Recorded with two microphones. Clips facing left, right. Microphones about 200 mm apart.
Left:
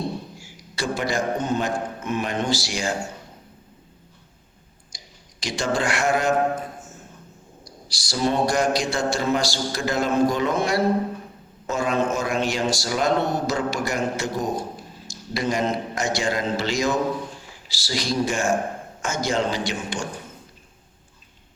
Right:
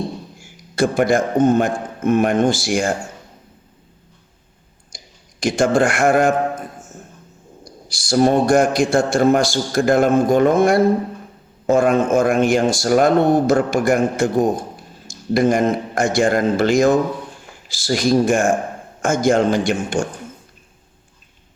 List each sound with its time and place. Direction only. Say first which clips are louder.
0.4 s a man's voice: right 11 dB; 50° right (ahead or behind)
4.9 s clicking: right 5 dB; 50° right (ahead or behind)
5.4 s a man's voice: right 9 dB; 50° right (ahead or behind)
7.6 s a man's voice: right 3 dB; 50° right (ahead or behind)